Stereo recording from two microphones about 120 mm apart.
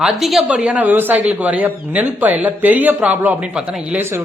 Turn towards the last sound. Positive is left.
turn(degrees=-10)  # may be behind; listen again after turning